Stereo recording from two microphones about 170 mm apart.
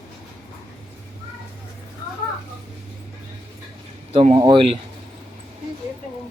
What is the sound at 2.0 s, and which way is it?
Children playing, 20° left (ahead or behind).